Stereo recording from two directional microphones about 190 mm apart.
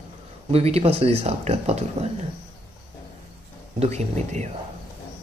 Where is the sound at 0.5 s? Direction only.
35° right (ahead or behind).